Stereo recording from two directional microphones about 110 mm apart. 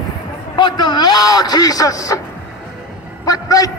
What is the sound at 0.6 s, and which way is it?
A man's voice, 45° left (ahead or behind).